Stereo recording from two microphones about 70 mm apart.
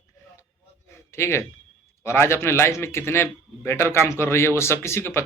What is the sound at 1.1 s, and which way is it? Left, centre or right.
A man's voice, left.